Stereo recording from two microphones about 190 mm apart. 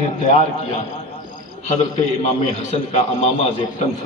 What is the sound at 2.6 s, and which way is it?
A man's voice, 35° left (ahead or behind).